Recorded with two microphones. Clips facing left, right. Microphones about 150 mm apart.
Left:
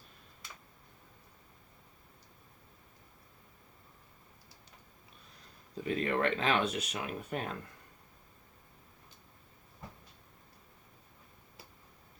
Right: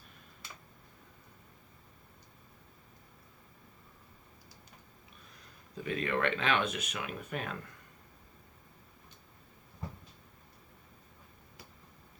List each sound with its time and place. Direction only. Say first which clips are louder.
5.7 s speech: left 1 dB; 30° left (ahead or behind)